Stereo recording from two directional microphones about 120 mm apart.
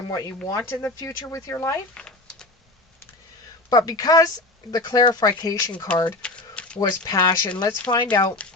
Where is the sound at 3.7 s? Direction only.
35° left (ahead or behind).